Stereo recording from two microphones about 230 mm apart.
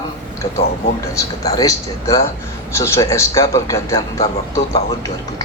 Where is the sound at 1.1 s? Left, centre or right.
Centre.